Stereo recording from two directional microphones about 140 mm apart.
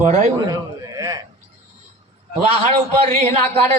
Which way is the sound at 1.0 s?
25° right (ahead or behind).